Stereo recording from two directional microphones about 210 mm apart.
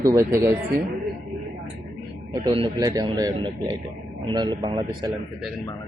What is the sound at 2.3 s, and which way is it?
A man's voice, 25° right (ahead or behind).